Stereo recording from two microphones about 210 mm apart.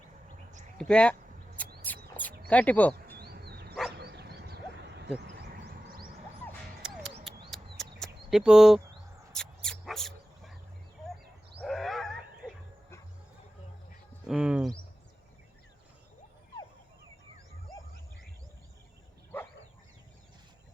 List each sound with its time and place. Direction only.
0.8 s speech: 5° left (ahead or behind)
1.9 s a sound: 10° left (ahead or behind)
2.5 s speech: 5° left (ahead or behind)
3.2 s dog: 50° right (ahead or behind)
3.9 s a sound: 50° right (ahead or behind)
6.8 s music: 5° right (ahead or behind)
7.3 s a sound: centre (ahead or behind)
9.3 s dog: 5° left (ahead or behind)
11.6 s wild animals: centre (ahead or behind)
14.3 s speech: 5° right (ahead or behind)